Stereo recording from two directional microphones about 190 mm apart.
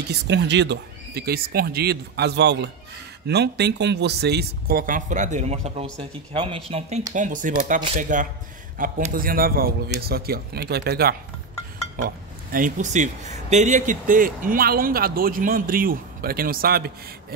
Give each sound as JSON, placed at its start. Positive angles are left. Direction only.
{"t": 0.1, "sound": "speech", "side_deg": -65}
{"t": 7.2, "sound": "speech", "side_deg": -45}
{"t": 12.5, "sound": "speech", "side_deg": -40}